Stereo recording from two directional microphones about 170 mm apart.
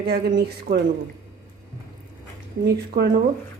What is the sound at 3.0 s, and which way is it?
Speech, 85° right.